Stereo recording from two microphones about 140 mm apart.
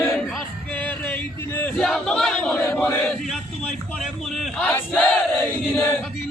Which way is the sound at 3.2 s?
Centre (ahead or behind).